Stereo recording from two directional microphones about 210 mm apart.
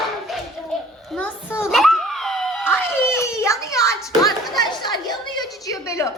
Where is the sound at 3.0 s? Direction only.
5° right (ahead or behind).